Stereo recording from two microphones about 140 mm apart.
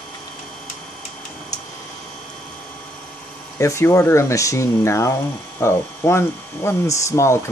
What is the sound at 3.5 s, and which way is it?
Speech, 20° left (ahead or behind).